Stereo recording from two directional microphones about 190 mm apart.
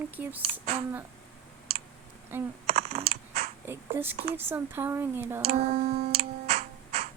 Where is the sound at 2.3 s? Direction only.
10° right (ahead or behind).